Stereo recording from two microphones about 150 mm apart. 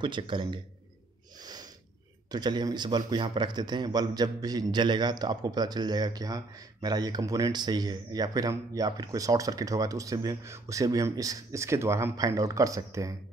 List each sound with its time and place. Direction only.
0.0 s a man's voice: 30° right (ahead or behind)
1.4 s snort: 25° right (ahead or behind)
2.3 s a man's voice: 30° right (ahead or behind)